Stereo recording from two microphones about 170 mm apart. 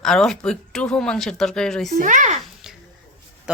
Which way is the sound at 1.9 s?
50° right (ahead or behind).